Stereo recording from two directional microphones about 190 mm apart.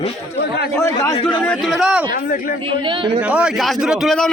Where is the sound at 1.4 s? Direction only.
5° left (ahead or behind).